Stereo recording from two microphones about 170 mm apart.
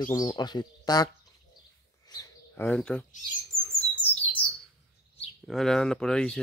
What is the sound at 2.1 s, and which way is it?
Bird, 20° left (ahead or behind).